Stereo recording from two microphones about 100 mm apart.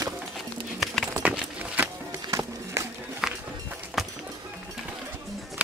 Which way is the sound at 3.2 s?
5° right (ahead or behind).